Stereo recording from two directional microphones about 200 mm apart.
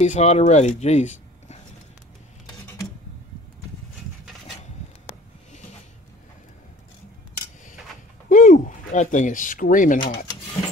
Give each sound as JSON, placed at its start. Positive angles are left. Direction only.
{"t": 0.0, "sound": "speech", "side_deg": 35}
{"t": 8.3, "sound": "speech", "side_deg": 40}
{"t": 9.9, "sound": "speech", "side_deg": 25}